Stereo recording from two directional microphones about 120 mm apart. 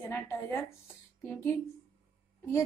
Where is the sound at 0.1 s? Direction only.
15° left (ahead or behind).